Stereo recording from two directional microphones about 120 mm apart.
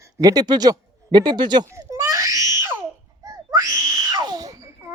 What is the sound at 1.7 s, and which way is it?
Crying, 25° right (ahead or behind).